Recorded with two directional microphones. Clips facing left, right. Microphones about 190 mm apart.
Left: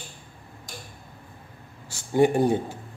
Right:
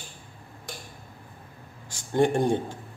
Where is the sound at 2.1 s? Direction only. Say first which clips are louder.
Left 2 dB; 5° left (ahead or behind).